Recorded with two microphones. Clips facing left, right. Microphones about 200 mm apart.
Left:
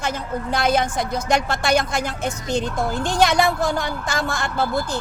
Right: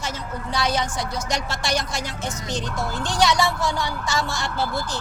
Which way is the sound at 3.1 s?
55° left (ahead or behind).